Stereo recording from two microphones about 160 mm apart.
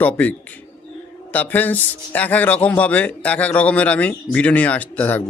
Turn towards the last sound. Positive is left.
turn(degrees=10)  # may be behind; listen again after turning